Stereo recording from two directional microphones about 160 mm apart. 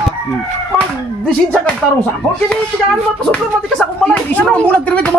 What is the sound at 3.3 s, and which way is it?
Speech, 5° left (ahead or behind).